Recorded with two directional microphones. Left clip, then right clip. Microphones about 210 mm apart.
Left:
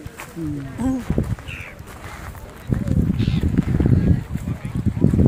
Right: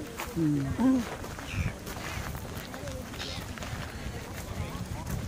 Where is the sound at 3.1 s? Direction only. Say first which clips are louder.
Left 10 dB; 25° left (ahead or behind).